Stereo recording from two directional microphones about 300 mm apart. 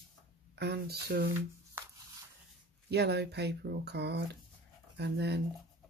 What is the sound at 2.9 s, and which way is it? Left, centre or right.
Speech, right.